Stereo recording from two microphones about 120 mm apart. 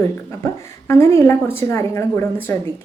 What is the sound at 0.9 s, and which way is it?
A woman's voice, 25° left (ahead or behind).